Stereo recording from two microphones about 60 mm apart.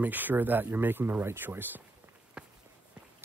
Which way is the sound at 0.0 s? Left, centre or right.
Right.